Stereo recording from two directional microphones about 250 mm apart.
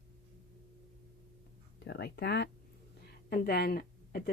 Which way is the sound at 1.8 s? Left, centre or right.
Left.